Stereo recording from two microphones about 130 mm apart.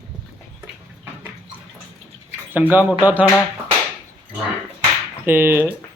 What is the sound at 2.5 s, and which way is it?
Speech, 15° right (ahead or behind).